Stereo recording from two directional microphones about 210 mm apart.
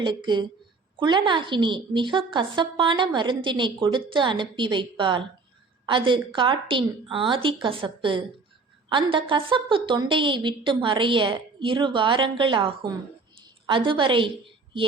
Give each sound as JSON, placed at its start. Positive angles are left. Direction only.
{"t": 0.0, "sound": "a woman's voice", "side_deg": -20}